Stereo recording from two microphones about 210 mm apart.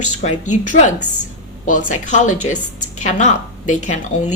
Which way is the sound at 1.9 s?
35° left (ahead or behind).